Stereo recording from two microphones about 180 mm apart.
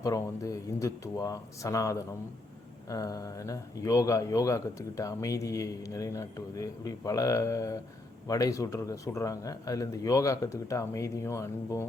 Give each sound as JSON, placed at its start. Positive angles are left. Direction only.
{"t": 0.0, "sound": "speech", "side_deg": 20}